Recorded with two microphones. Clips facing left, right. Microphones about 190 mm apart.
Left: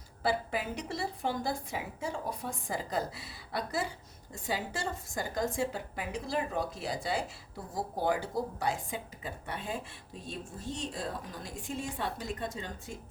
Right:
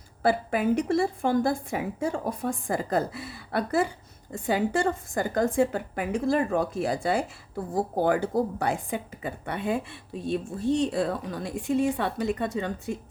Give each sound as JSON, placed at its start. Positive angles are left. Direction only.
{"t": 0.2, "sound": "a woman's voice", "side_deg": -50}